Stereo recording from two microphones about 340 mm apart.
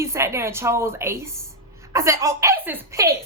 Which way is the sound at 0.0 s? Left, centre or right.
Centre.